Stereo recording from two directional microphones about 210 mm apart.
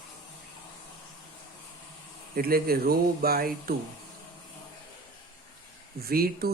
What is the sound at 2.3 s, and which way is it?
Speech, 45° right (ahead or behind).